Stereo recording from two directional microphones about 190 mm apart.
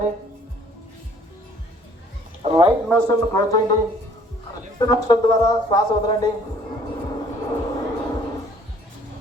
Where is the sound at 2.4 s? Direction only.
30° right (ahead or behind).